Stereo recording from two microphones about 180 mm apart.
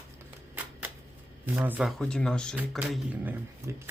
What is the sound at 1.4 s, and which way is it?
Speech, 10° right (ahead or behind).